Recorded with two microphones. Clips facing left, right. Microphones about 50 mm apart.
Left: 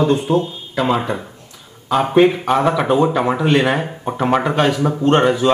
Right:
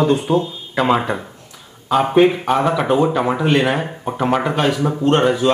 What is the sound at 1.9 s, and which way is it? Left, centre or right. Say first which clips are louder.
Speech: even; centre.